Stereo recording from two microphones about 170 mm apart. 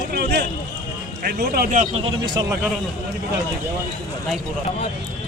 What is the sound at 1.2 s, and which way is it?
Speech, 65° right (ahead or behind).